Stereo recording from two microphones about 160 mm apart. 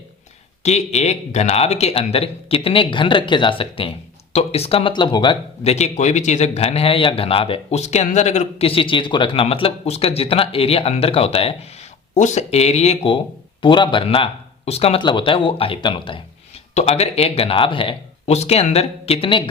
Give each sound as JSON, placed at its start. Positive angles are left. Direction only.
{"t": 0.6, "sound": "speech", "side_deg": 45}
{"t": 5.7, "sound": "speech", "side_deg": 45}